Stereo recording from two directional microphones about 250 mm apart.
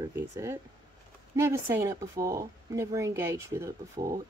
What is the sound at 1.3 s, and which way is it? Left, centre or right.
Speech, centre.